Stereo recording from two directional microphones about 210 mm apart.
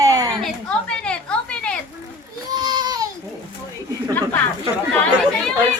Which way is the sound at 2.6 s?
20° right (ahead or behind).